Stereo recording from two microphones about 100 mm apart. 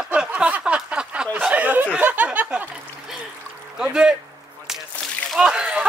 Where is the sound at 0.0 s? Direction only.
10° right (ahead or behind).